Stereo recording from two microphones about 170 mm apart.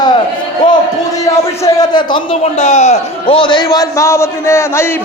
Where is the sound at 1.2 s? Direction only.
20° left (ahead or behind).